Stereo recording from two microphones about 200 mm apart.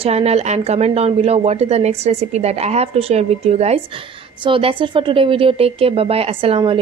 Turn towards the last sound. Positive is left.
turn(degrees=-25)  # may be behind; listen again after turning